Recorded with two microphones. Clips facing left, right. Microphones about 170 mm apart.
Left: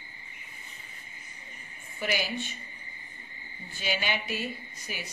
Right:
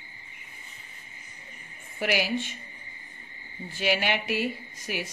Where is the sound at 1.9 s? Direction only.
75° right (ahead or behind).